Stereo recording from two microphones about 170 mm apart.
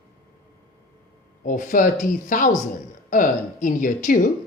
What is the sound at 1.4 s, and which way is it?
A woman's voice, 50° left (ahead or behind).